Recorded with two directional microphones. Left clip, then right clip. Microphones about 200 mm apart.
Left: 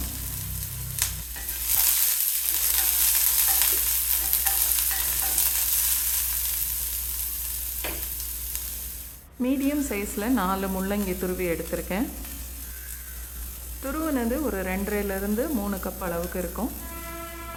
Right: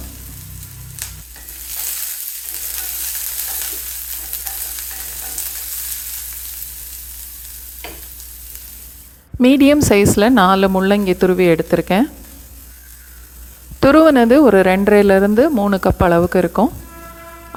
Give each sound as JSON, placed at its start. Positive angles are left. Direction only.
{"t": 9.4, "sound": "speech", "side_deg": -50}
{"t": 13.8, "sound": "speech", "side_deg": -45}